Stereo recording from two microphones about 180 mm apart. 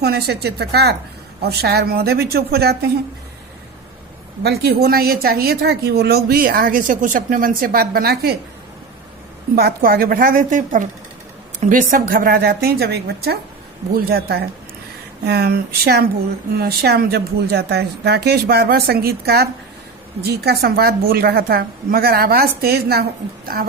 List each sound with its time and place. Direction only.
0.0 s a woman's voice: 65° right (ahead or behind)
4.4 s a woman's voice: 65° right (ahead or behind)
9.6 s a woman's voice: 60° right (ahead or behind)